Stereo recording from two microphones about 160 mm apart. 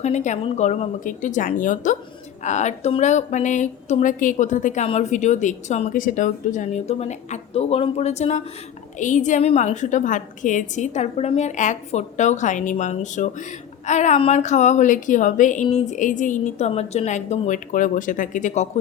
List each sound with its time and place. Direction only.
0.0 s speech: 45° left (ahead or behind)